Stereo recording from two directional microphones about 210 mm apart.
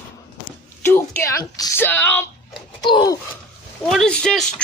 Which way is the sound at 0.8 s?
10° left (ahead or behind).